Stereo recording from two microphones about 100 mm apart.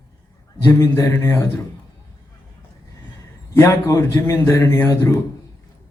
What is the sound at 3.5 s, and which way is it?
Speech, 30° left (ahead or behind).